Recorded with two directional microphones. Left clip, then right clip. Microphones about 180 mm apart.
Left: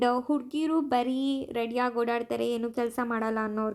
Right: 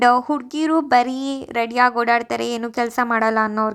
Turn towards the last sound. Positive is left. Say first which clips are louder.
# right 11 dB
turn(degrees=-20)  # may be behind; listen again after turning